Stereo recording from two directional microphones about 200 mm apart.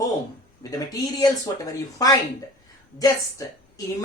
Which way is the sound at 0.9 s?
20° left (ahead or behind).